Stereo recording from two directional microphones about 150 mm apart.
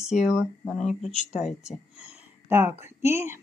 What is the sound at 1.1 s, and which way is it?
Speech, 50° left (ahead or behind).